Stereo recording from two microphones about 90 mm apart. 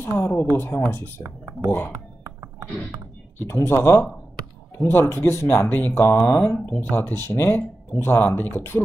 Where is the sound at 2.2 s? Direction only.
25° right (ahead or behind).